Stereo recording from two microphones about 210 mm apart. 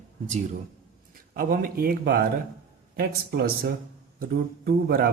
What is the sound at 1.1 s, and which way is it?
Speech, 45° right (ahead or behind).